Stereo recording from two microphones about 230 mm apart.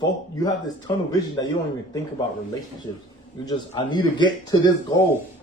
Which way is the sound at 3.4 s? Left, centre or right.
Centre.